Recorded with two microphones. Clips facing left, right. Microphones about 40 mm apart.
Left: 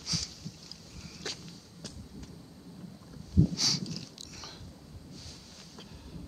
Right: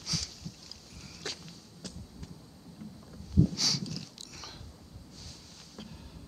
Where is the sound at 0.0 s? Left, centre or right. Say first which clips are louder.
Even; centre.